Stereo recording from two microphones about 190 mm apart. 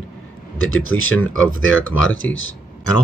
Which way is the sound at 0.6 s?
90° left.